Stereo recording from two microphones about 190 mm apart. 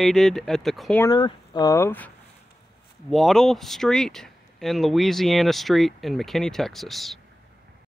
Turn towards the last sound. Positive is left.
turn(degrees=0)  # may be behind; listen again after turning